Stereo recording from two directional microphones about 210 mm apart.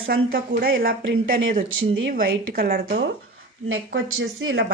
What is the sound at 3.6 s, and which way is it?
Speech, 70° right (ahead or behind).